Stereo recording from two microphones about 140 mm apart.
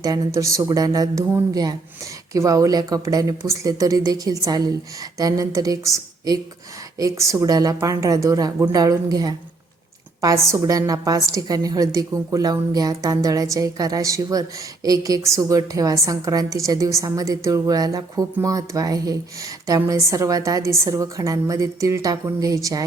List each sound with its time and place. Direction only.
0.0 s a woman's voice: 25° right (ahead or behind)
2.3 s a woman's voice: 25° right (ahead or behind)